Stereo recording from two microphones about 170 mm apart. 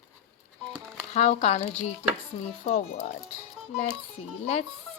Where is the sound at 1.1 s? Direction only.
40° left (ahead or behind).